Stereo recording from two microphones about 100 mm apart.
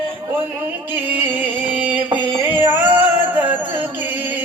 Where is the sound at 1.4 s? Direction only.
15° right (ahead or behind).